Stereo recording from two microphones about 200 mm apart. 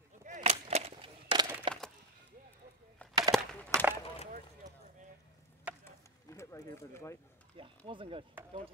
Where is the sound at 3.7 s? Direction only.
10° right (ahead or behind).